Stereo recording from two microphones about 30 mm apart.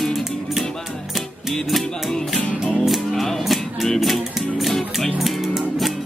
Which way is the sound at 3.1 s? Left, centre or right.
Centre.